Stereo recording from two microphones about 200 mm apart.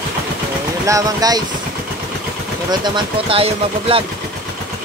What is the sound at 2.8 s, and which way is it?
Speech, 25° right (ahead or behind).